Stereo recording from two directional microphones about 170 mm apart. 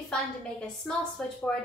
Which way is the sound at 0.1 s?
5° left (ahead or behind).